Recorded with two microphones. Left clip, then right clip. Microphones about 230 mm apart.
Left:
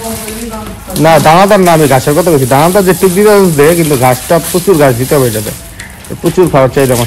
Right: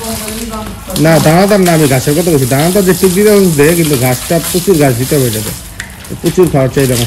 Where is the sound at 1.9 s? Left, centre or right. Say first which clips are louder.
Left 3 dB; left.